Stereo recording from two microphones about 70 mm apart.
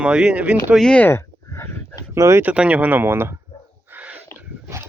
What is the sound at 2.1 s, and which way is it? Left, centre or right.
Speech, right.